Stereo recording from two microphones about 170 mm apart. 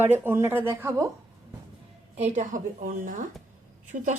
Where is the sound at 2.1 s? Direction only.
45° right (ahead or behind).